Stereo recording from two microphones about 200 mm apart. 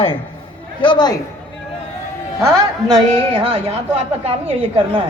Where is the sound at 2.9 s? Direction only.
25° right (ahead or behind).